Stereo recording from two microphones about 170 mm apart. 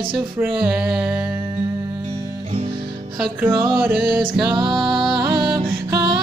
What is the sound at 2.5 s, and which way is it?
Music, 40° right (ahead or behind).